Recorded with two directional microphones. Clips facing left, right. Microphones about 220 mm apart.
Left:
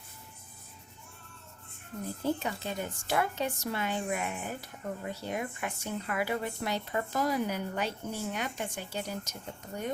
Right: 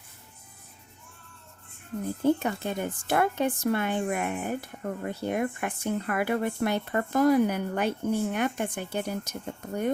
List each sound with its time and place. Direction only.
2.2 s a woman's voice: 55° right (ahead or behind)